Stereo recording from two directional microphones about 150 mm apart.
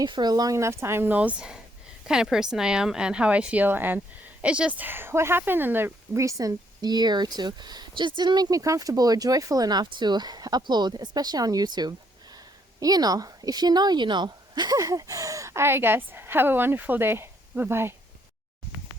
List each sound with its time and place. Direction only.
0.0 s a woman's voice: 30° right (ahead or behind)